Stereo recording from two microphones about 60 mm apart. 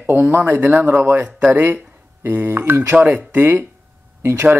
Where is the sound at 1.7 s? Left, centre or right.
Centre.